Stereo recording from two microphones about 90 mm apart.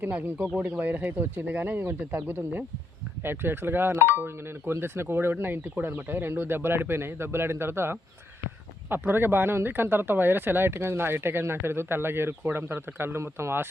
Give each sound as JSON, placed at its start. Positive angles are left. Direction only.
{"t": 0.0, "sound": "speech", "side_deg": -20}